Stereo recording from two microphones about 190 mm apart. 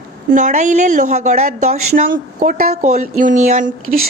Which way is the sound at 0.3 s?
40° right (ahead or behind).